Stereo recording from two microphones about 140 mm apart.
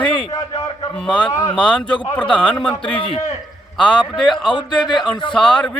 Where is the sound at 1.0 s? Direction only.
10° left (ahead or behind).